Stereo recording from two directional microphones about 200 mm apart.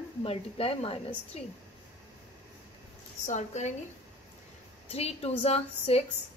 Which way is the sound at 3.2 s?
35° left (ahead or behind).